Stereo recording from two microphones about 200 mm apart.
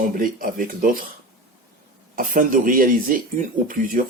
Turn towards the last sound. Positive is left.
turn(degrees=-45)  # may be behind; listen again after turning